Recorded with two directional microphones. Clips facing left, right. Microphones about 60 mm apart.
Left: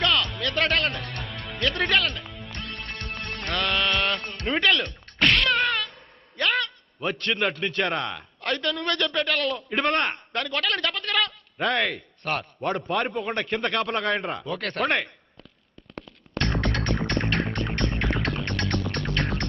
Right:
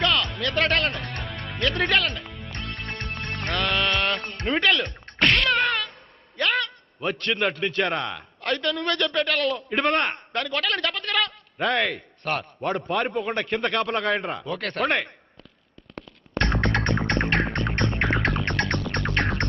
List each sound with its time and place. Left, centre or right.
0.0 s music: centre
0.9 s music: right
1.6 s a man's voice: centre
3.5 s music: centre
4.4 s a man's voice: centre
5.2 s a sound: centre
6.3 s a man's voice: centre
16.4 s music: right